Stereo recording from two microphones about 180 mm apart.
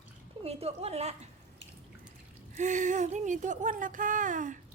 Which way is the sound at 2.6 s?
45° right (ahead or behind).